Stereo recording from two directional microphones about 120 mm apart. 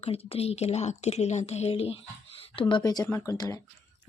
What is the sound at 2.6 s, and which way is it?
Speech, 40° left (ahead or behind).